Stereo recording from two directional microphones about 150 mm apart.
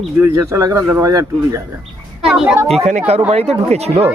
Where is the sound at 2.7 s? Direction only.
45° right (ahead or behind).